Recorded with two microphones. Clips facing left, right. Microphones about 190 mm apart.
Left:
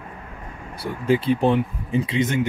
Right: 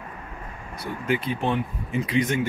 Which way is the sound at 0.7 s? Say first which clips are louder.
Left 5 dB; 30° left (ahead or behind).